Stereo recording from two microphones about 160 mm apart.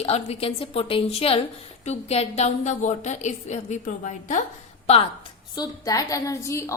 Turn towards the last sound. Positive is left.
turn(degrees=20)  # may be behind; listen again after turning